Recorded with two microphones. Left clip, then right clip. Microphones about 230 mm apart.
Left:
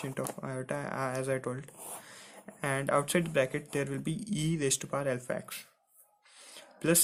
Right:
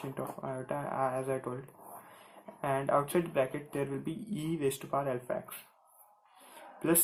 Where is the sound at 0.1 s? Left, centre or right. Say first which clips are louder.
Left 1 dB; left.